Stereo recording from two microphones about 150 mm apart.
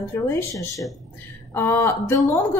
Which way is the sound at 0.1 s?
20° left (ahead or behind).